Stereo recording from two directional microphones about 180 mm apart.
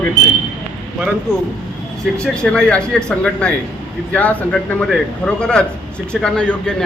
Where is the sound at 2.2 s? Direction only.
5° left (ahead or behind).